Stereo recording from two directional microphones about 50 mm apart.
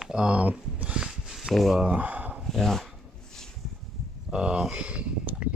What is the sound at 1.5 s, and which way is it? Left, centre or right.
Speech, centre.